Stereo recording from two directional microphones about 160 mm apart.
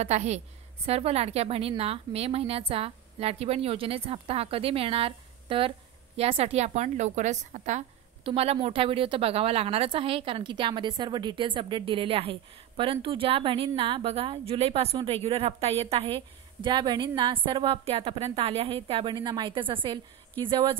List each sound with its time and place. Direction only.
0.0 s a woman's voice: 45° right (ahead or behind)
8.2 s a woman's voice: 35° right (ahead or behind)